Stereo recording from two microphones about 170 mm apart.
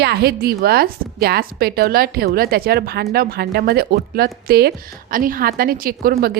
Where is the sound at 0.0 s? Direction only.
70° right (ahead or behind).